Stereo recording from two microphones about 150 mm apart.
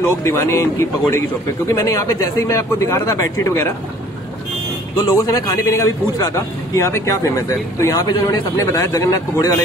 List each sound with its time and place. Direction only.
0.1 s a man's voice: 20° left (ahead or behind)
4.9 s a man's voice: 20° left (ahead or behind)